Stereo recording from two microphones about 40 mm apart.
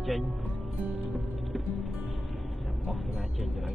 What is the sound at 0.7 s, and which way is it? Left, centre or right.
Music, right.